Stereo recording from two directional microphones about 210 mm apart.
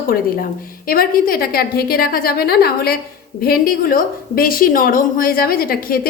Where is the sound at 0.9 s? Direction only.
45° left (ahead or behind).